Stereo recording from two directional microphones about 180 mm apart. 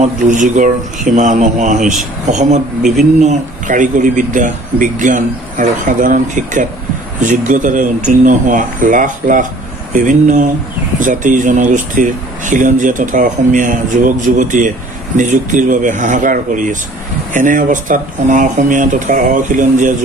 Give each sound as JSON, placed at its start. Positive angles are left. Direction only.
{"t": 0.0, "sound": "speech", "side_deg": -45}